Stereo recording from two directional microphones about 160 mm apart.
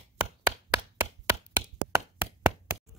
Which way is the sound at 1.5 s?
15° right (ahead or behind).